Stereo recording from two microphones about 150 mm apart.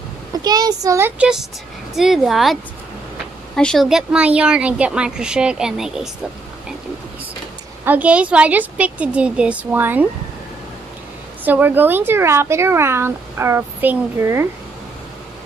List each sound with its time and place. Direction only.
0.4 s a child's voice: 25° right (ahead or behind); by 6.0 s 5° right (ahead or behind)
7.8 s speech: 10° right (ahead or behind)
11.4 s speech: 10° right (ahead or behind)